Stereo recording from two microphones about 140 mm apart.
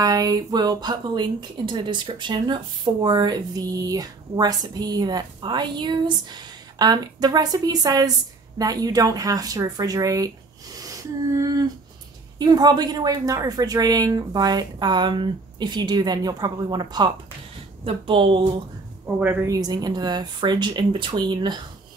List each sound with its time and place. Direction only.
0.0 s a woman's voice: 25° right (ahead or behind)
10.8 s a sound: 25° right (ahead or behind)
12.4 s a woman's voice: 30° right (ahead or behind)
19.1 s a woman's voice: 20° right (ahead or behind)